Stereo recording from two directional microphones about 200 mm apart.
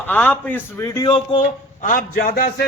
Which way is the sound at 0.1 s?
10° left (ahead or behind).